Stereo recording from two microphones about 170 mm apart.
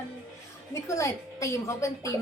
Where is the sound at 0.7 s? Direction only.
15° left (ahead or behind).